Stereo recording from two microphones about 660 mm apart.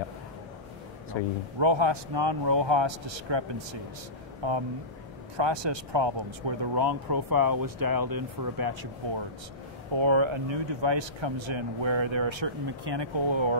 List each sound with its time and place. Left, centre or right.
1.6 s speech: right
9.9 s speech: right